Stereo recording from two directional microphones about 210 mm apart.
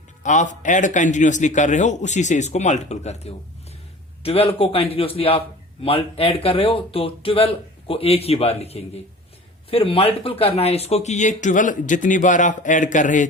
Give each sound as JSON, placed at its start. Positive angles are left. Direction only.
{"t": 0.2, "sound": "speech", "side_deg": 35}